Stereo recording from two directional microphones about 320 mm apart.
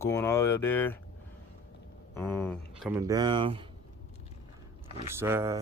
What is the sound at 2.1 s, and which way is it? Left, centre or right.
Speech, centre.